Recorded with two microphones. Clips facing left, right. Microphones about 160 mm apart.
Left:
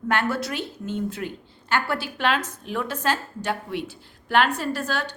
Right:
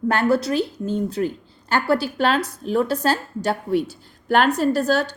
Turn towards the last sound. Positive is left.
turn(degrees=-40)  # may be behind; listen again after turning